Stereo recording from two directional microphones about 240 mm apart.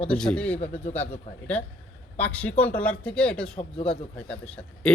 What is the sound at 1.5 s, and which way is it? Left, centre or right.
Speech, centre.